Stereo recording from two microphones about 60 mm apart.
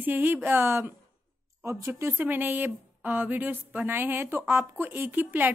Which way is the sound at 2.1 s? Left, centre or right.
Right.